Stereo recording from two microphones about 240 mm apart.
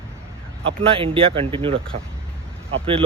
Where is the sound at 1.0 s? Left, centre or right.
Right.